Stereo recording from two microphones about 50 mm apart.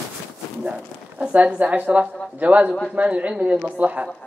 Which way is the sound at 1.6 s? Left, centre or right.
Right.